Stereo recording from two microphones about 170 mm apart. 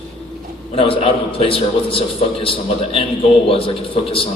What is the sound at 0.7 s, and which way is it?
A man's voice, 35° left (ahead or behind).